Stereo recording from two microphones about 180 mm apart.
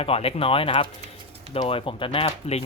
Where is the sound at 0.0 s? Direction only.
35° left (ahead or behind).